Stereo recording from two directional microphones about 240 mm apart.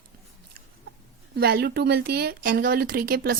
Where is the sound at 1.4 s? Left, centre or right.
Right.